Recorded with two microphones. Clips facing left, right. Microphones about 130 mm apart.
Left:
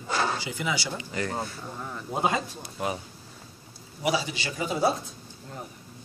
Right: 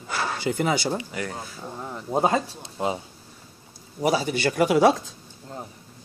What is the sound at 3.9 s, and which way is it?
Speech, 45° right (ahead or behind).